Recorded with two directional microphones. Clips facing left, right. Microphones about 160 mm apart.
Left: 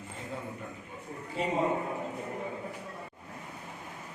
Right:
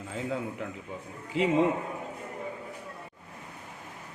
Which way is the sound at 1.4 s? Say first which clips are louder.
Right 6 dB; 90° right.